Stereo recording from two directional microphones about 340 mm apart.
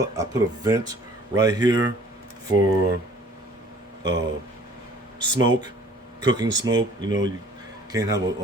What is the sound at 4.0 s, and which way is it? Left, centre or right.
Speech, right.